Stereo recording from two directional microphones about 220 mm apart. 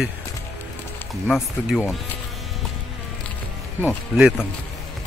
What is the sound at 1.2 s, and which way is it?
Speech, centre (ahead or behind).